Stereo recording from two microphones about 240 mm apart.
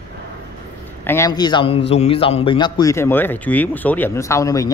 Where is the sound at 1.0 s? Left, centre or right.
Centre.